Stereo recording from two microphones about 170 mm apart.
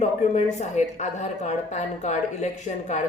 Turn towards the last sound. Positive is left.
turn(degrees=45)  # may be behind; listen again after turning